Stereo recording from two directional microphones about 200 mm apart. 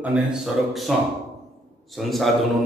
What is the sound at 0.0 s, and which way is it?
A man's voice, 5° right (ahead or behind).